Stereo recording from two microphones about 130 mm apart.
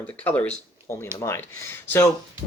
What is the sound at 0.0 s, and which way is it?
Speech, 10° left (ahead or behind).